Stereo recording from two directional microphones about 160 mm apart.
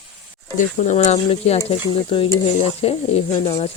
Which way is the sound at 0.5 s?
50° left (ahead or behind).